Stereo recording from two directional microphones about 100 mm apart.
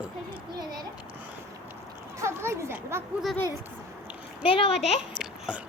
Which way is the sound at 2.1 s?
25° right (ahead or behind).